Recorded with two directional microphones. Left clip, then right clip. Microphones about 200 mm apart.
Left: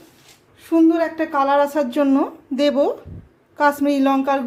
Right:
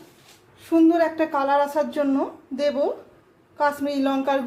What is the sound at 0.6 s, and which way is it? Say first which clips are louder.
Speech: left 2 dB; 10° left (ahead or behind).